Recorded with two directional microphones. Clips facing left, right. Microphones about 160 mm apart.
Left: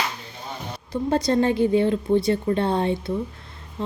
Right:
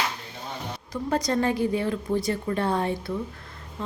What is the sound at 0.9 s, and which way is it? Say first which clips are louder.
A woman's voice: left 4 dB; 30° left (ahead or behind).